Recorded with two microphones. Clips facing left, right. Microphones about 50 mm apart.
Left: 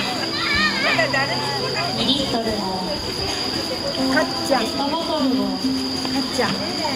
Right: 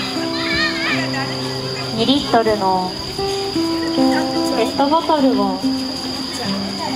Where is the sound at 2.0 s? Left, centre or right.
Right.